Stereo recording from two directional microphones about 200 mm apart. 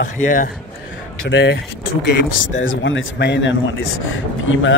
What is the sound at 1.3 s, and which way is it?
Speech, 65° left (ahead or behind).